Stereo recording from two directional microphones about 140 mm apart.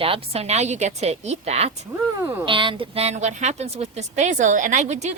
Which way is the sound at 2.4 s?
35° right (ahead or behind).